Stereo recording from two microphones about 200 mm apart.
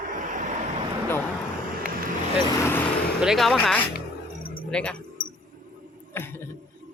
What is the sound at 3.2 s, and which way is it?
Speech, centre (ahead or behind).